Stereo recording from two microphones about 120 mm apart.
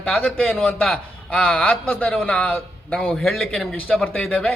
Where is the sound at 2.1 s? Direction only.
5° left (ahead or behind).